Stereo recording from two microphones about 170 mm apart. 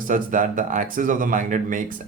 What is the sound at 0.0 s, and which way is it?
Speech, 50° right (ahead or behind).